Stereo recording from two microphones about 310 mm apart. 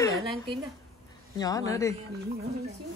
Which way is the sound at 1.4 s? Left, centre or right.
Centre.